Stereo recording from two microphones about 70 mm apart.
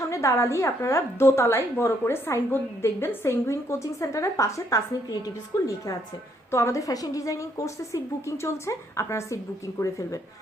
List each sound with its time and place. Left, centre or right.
0.1 s a woman's voice: left